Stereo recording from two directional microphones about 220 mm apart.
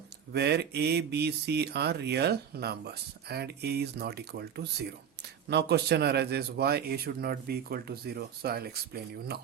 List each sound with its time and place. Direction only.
0.3 s speech: 50° right (ahead or behind)